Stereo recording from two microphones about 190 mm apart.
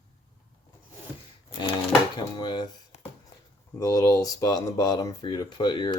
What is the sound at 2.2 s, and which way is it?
Speech, 25° left (ahead or behind).